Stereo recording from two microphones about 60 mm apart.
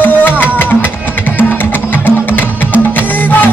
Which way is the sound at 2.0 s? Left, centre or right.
Left.